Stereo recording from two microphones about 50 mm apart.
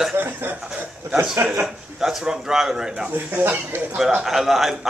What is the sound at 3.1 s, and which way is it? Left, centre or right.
Speech, right.